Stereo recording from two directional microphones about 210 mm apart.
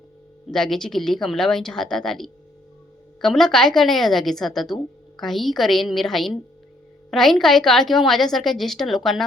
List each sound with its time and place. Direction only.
0.4 s a woman's voice: centre (ahead or behind)